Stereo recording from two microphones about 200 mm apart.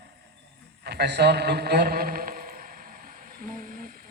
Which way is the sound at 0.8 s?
55° right (ahead or behind).